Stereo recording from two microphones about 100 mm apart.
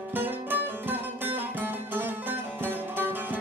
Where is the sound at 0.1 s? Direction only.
20° right (ahead or behind).